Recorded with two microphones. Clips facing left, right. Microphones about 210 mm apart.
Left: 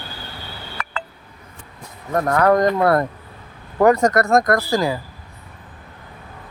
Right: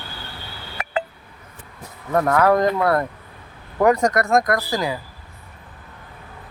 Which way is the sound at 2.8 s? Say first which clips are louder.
Left 3 dB; 40° left (ahead or behind).